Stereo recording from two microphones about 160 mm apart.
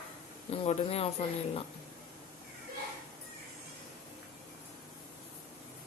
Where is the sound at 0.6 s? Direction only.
40° left (ahead or behind).